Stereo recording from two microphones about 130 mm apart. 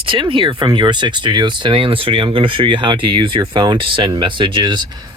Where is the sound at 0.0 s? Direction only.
45° right (ahead or behind).